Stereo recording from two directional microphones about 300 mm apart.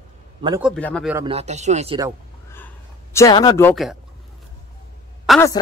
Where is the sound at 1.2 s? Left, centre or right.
Centre.